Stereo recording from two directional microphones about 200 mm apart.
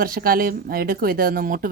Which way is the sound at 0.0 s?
45° right (ahead or behind).